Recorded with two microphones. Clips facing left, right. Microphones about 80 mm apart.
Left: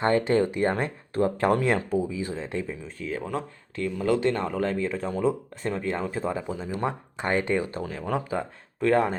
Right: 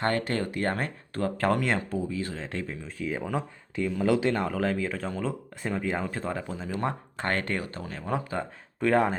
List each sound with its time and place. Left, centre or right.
0.0 s speech: left; by 3.1 s centre
3.3 s speech: centre
6.1 s speech: centre
6.7 s speech: centre
8.4 s speech: centre